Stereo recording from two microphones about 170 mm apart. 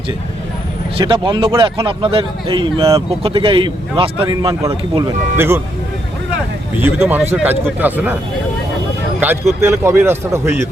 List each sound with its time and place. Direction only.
0.9 s speech: 30° right (ahead or behind)
4.6 s a man's voice: 15° right (ahead or behind)
6.8 s a man's voice: 10° right (ahead or behind)
9.6 s a man's voice: 15° right (ahead or behind)